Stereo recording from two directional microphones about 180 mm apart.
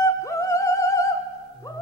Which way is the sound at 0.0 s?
15° left (ahead or behind).